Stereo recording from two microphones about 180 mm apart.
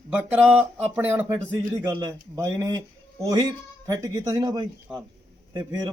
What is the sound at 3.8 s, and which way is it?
Speech, 20° right (ahead or behind).